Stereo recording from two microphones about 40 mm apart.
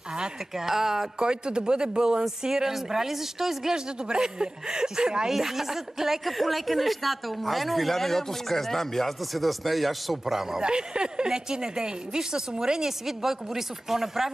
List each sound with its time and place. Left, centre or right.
0.6 s a woman's voice: centre
1.2 s a woman's voice: right
5.3 s speech: centre
10.6 s a woman's voice: right